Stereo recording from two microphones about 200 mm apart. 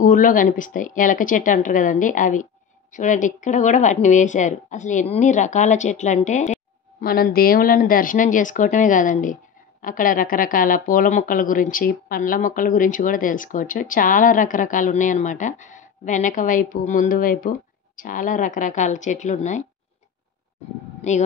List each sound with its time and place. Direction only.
0.0 s speech: 40° left (ahead or behind)
21.0 s speech: 35° left (ahead or behind)